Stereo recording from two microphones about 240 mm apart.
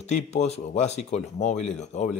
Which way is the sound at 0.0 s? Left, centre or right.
Left.